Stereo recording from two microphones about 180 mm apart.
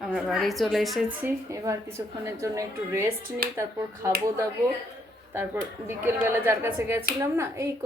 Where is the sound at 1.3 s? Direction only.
15° right (ahead or behind).